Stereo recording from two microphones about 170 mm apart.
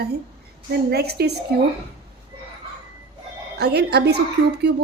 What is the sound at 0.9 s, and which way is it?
Speech, 70° right (ahead or behind).